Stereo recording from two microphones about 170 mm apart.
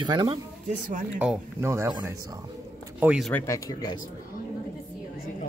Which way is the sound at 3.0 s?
5° right (ahead or behind).